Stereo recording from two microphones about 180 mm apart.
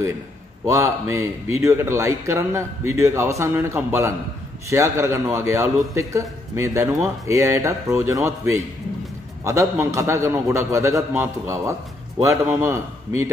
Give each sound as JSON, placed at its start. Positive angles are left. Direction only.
{"t": 0.7, "sound": "a man's voice", "side_deg": -15}